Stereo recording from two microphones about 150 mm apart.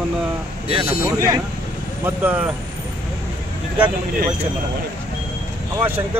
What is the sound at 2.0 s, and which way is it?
Speech, 15° right (ahead or behind).